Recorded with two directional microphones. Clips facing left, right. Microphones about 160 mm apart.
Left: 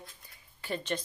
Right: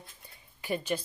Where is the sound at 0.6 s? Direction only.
10° right (ahead or behind).